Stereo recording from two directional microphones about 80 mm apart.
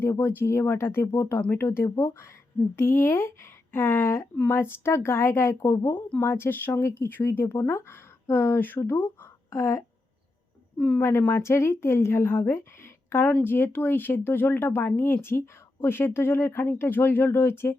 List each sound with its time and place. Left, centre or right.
0.0 s speech: left
10.8 s speech: centre
11.2 s speech: left